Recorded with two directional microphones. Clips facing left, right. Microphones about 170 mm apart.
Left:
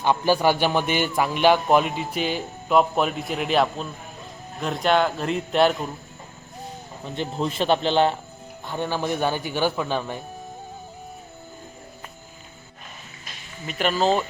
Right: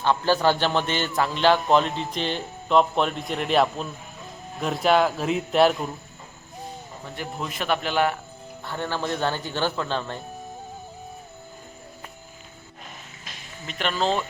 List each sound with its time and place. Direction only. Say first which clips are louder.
0.0 s a man's voice: left 1 dB; 15° left (ahead or behind)
7.0 s speech: left 6 dB; 25° left (ahead or behind)
8.6 s a man's voice: left 2 dB; 15° left (ahead or behind)
13.7 s speech: left 4 dB; 5° left (ahead or behind)